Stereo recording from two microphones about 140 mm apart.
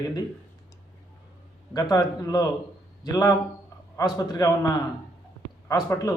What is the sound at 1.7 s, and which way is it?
A man's voice, 25° left (ahead or behind).